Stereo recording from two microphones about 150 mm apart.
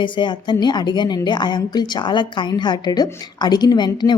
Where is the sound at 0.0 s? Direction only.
30° left (ahead or behind).